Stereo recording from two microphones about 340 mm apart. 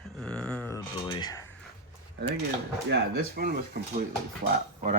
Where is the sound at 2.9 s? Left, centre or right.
Right.